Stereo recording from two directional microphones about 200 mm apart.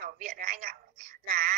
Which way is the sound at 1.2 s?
50° right (ahead or behind).